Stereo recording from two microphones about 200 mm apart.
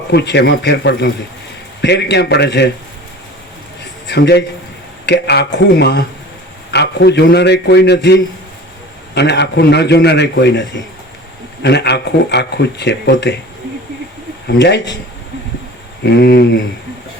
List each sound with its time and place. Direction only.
0.1 s speech: 55° left (ahead or behind)
4.1 s speech: 60° left (ahead or behind)
14.4 s speech: 60° left (ahead or behind)
16.0 s speech: 55° left (ahead or behind)